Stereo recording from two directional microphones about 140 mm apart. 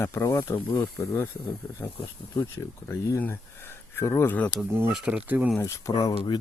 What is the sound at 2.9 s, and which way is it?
Speech, 15° left (ahead or behind).